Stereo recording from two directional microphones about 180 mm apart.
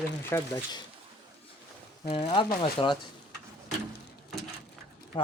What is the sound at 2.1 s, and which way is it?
Speech, 35° left (ahead or behind).